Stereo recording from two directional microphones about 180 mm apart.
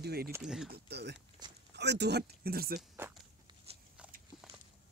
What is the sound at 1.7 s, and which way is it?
Speech, 70° right (ahead or behind).